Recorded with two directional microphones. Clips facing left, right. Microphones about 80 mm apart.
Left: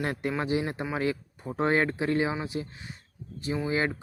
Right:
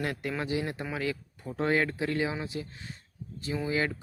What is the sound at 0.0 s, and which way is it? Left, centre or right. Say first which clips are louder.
Speech: left 3 dB; left.